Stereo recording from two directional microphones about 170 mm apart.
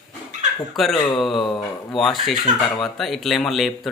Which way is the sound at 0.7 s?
Centre (ahead or behind).